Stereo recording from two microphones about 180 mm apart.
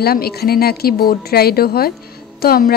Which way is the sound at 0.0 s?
60° left (ahead or behind).